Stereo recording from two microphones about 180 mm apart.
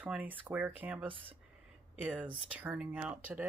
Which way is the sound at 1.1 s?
30° right (ahead or behind).